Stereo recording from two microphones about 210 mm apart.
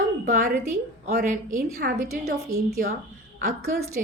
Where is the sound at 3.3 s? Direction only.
45° right (ahead or behind).